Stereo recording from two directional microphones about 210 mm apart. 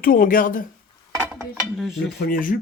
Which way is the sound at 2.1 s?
40° left (ahead or behind).